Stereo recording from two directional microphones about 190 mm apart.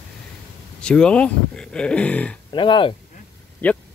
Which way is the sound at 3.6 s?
10° left (ahead or behind).